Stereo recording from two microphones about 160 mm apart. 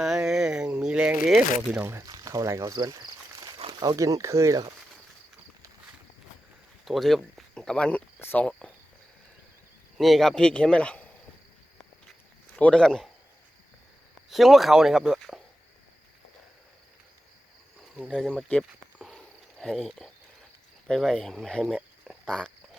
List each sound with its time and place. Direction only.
0.0 s a sound: 5° right (ahead or behind)
1.8 s speech: 15° right (ahead or behind)
6.8 s speech: centre (ahead or behind)
10.0 s speech: centre (ahead or behind)
12.5 s speech: 5° left (ahead or behind)
14.3 s speech: centre (ahead or behind)
18.1 s speech: centre (ahead or behind)
18.9 s a sound: centre (ahead or behind)
20.8 s speech: 5° left (ahead or behind)
22.0 s a sound: 5° left (ahead or behind)